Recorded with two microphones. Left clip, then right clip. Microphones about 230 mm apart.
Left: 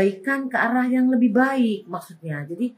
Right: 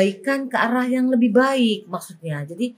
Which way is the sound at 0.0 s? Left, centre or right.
Right.